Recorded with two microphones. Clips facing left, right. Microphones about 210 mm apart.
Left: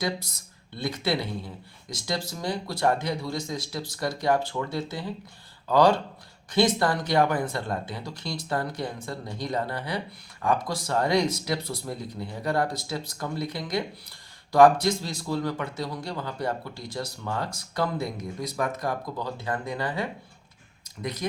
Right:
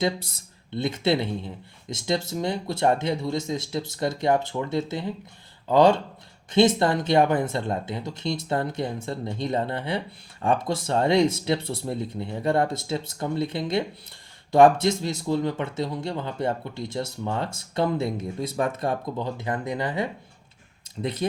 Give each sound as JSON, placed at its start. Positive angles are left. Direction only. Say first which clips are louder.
{"t": 0.7, "sound": "speech", "louder": "right 4 dB", "side_deg": -25}